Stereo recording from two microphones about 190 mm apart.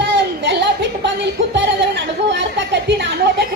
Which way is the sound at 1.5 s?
65° right (ahead or behind).